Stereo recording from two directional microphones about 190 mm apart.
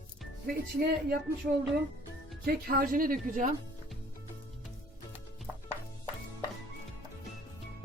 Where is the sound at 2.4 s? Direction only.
50° right (ahead or behind).